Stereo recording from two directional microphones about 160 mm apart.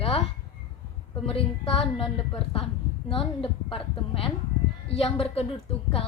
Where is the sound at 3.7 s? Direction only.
35° left (ahead or behind).